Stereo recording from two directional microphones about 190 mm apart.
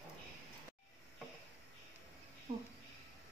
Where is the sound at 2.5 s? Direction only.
35° right (ahead or behind).